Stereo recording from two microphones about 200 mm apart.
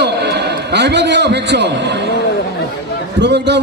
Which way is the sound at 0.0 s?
55° right (ahead or behind).